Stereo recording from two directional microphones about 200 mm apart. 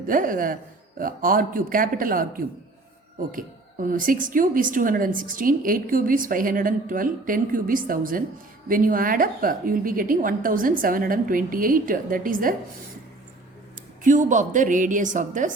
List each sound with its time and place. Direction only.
0.1 s a woman's voice: 45° right (ahead or behind)
14.0 s a woman's voice: 40° right (ahead or behind)